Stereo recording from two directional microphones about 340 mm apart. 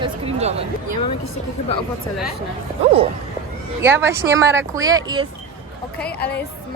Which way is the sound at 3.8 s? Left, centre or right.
Centre.